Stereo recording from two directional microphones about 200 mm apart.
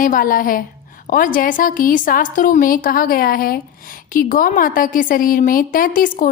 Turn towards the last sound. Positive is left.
turn(degrees=45)  # may be behind; listen again after turning